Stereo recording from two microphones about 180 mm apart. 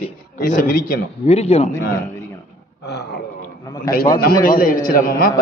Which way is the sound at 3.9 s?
60° left (ahead or behind).